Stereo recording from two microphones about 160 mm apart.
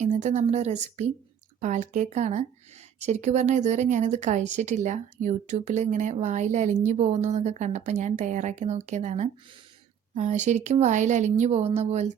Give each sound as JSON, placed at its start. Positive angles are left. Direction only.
{"t": 0.0, "sound": "speech", "side_deg": -45}